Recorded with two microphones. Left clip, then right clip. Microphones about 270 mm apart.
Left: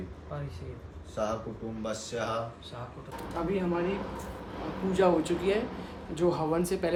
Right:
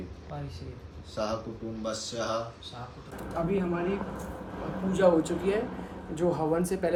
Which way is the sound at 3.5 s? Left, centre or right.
Left.